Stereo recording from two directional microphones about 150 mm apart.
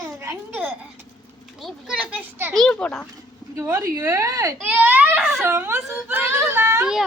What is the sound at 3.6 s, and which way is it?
Speech, 15° right (ahead or behind).